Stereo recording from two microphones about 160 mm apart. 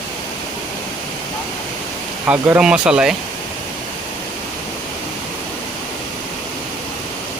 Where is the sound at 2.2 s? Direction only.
10° right (ahead or behind).